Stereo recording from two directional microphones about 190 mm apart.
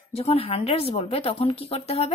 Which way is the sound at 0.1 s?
30° left (ahead or behind).